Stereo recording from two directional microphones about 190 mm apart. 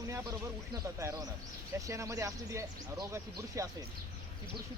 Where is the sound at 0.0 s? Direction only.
15° right (ahead or behind).